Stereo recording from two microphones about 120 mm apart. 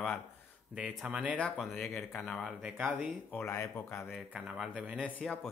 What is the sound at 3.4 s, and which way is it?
Speech, 20° left (ahead or behind).